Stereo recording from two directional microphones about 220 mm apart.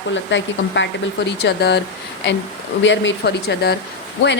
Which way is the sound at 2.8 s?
55° left (ahead or behind).